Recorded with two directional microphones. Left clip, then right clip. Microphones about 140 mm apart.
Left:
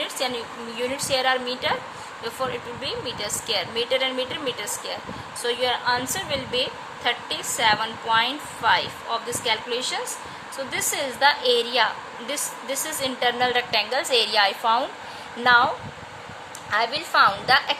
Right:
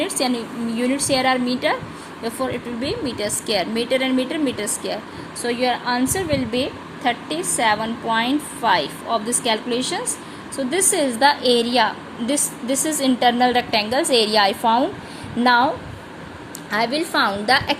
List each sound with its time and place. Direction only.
0.0 s a woman's voice: 20° right (ahead or behind)
16.7 s a woman's voice: 15° right (ahead or behind)